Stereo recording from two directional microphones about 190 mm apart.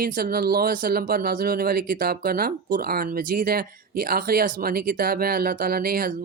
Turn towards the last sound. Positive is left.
turn(degrees=-50)  # may be behind; listen again after turning